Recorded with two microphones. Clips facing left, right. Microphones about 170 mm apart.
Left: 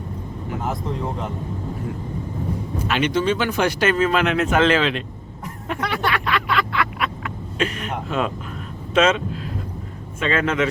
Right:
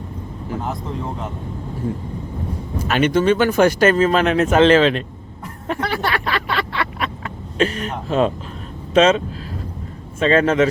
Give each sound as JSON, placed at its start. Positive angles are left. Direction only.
{"t": 0.6, "sound": "speech", "side_deg": 0}
{"t": 2.8, "sound": "speech", "side_deg": -45}
{"t": 5.6, "sound": "a sound", "side_deg": -35}
{"t": 7.6, "sound": "speech", "side_deg": -35}